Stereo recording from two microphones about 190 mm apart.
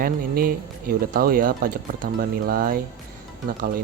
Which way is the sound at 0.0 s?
50° right (ahead or behind).